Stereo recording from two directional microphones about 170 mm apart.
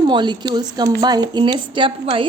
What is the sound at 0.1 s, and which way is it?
A woman's voice, 25° right (ahead or behind).